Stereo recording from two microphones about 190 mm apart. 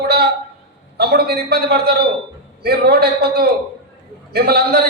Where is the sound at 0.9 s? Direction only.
55° right (ahead or behind).